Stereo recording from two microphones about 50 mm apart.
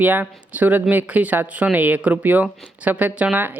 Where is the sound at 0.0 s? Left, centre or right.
Right.